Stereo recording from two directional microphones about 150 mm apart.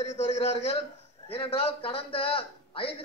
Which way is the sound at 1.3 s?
40° left (ahead or behind).